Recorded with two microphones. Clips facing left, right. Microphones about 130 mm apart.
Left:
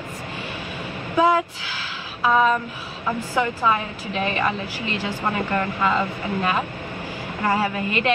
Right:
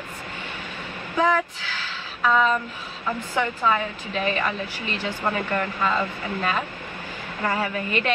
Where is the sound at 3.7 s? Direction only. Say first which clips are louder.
Left 1 dB; 25° left (ahead or behind).